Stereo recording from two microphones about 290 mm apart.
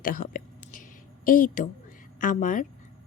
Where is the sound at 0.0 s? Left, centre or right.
Left.